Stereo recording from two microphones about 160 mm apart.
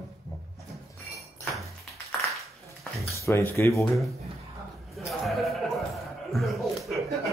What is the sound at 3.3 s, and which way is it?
Speech, 15° left (ahead or behind).